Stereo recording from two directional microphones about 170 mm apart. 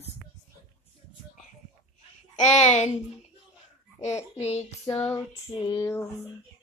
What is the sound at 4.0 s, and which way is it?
Speech, 40° left (ahead or behind).